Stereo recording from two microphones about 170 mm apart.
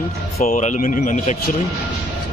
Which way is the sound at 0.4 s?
45° left (ahead or behind).